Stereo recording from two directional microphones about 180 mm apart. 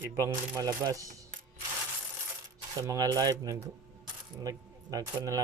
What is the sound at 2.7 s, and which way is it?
Speech, 20° right (ahead or behind).